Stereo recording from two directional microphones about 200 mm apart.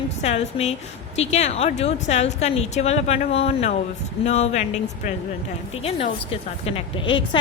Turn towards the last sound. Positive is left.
turn(degrees=25)  # may be behind; listen again after turning